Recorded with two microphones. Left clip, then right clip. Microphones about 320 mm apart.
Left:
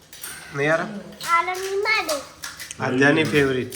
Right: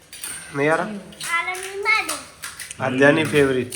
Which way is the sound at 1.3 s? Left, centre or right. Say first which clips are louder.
Left 3 dB; left.